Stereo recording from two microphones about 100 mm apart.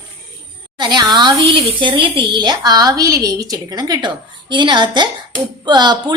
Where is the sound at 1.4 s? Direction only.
60° right (ahead or behind).